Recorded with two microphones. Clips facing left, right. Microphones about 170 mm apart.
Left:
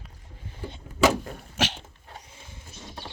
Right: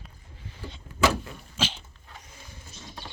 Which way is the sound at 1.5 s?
70° left (ahead or behind).